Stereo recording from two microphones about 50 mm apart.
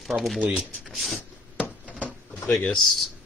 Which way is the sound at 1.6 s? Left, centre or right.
Left.